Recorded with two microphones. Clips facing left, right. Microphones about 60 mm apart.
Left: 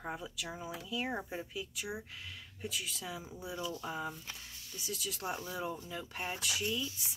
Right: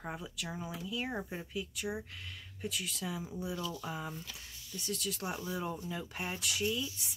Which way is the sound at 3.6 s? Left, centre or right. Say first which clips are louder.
Even; centre.